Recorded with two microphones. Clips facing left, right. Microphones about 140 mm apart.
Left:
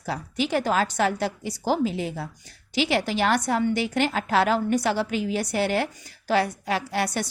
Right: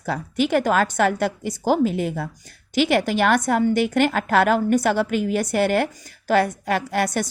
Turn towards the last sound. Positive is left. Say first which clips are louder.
# right 4 dB
turn(degrees=-50)  # may be behind; listen again after turning